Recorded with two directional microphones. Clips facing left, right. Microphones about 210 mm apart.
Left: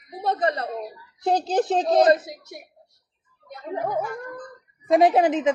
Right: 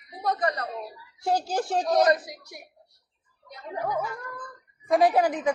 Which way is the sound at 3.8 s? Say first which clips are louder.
Left 2 dB; 50° left (ahead or behind).